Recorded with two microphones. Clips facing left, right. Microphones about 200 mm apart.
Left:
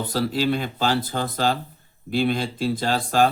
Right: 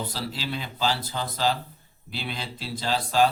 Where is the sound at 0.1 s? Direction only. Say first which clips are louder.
Left 10 dB; 50° left (ahead or behind).